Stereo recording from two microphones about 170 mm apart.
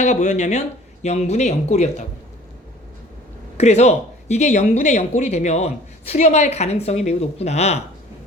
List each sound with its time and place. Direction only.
0.0 s speech: 45° left (ahead or behind)
3.6 s speech: 40° left (ahead or behind)